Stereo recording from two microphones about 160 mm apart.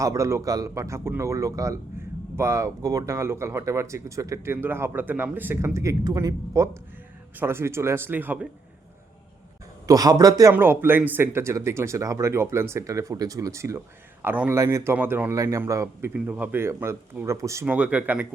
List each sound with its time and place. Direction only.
0.0 s speech: 20° right (ahead or behind)
9.8 s speech: 20° right (ahead or behind)